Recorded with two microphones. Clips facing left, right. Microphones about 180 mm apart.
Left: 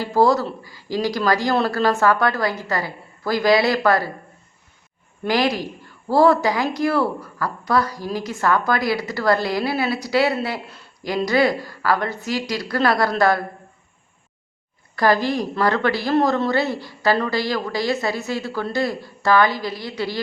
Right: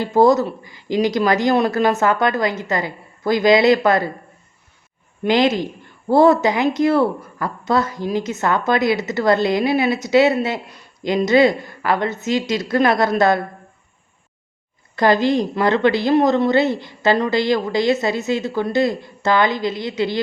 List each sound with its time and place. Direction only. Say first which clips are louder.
0.0 s speech: right 3 dB; 20° right (ahead or behind)
5.2 s speech: right 4 dB; 20° right (ahead or behind)
14.9 s speech: right 3 dB; 20° right (ahead or behind)